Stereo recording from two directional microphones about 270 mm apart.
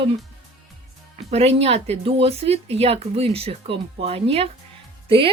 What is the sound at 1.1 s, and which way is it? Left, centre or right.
Speech, right.